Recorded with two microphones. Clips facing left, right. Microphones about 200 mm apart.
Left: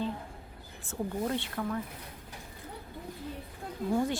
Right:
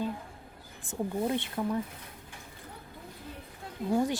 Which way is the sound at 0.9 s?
15° right (ahead or behind).